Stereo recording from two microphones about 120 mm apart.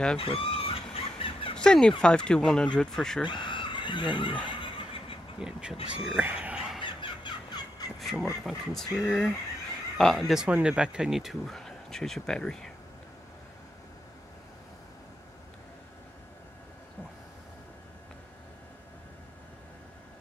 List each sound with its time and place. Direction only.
0.2 s a sound: 50° left (ahead or behind)
1.6 s speech: 5° left (ahead or behind)
3.3 s snicker: 40° left (ahead or behind)
5.4 s speech: 5° right (ahead or behind)
6.8 s a sound: 45° left (ahead or behind)
8.0 s speech: centre (ahead or behind)